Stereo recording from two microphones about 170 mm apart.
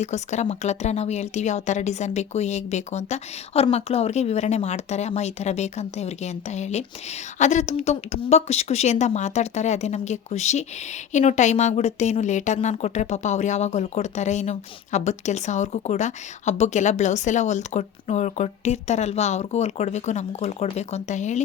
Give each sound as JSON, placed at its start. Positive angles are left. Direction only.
{"t": 0.0, "sound": "speech", "side_deg": 45}